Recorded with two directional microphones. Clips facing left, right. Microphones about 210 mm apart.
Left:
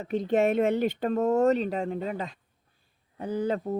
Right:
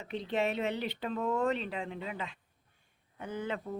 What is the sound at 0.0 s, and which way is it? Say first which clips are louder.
Speech: left 8 dB; 45° left (ahead or behind).